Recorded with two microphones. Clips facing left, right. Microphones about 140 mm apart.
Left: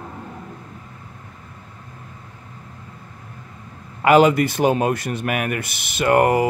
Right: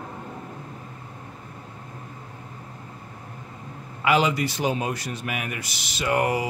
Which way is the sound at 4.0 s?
50° left (ahead or behind).